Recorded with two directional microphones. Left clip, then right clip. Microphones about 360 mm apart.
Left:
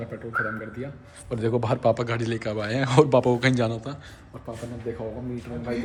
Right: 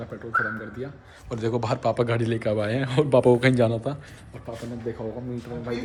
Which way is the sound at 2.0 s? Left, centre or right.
Centre.